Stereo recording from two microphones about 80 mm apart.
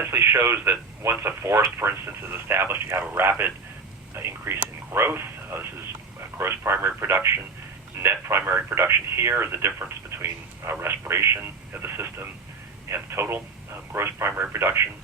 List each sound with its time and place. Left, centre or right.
0.0 s speech: right